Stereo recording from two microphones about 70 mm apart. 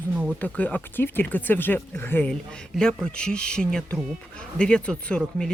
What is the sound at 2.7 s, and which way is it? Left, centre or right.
Speech, centre.